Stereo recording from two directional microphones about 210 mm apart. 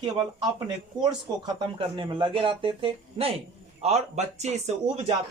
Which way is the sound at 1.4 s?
20° right (ahead or behind).